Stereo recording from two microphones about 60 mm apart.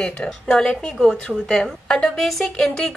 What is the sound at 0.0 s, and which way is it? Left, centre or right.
Speech, centre.